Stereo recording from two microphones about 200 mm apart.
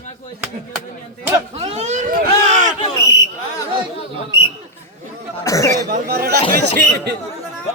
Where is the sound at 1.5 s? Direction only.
35° right (ahead or behind).